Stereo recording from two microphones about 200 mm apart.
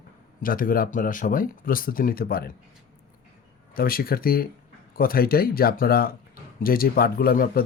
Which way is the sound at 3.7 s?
45° left (ahead or behind).